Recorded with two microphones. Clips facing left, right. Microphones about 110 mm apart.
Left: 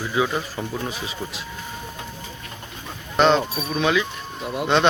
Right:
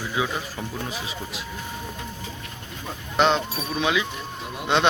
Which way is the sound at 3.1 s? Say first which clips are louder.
Left 3 dB; 5° right (ahead or behind).